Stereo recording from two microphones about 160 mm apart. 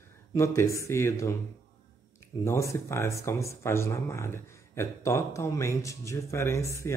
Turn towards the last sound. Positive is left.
turn(degrees=20)  # may be behind; listen again after turning